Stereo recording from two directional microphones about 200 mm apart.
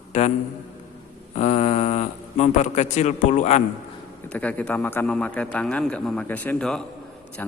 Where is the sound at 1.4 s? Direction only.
35° left (ahead or behind).